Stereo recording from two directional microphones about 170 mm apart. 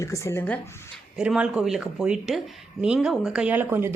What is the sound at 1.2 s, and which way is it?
Speech, 5° right (ahead or behind).